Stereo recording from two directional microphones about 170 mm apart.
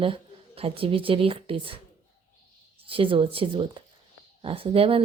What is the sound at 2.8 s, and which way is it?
Speech, 30° right (ahead or behind).